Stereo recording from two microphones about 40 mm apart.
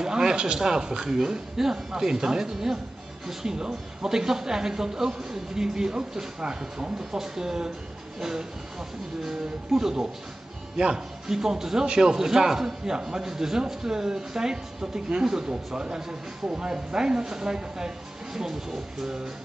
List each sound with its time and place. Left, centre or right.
0.0 s speech: centre